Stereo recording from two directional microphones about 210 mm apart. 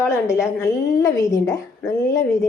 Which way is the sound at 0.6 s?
15° left (ahead or behind).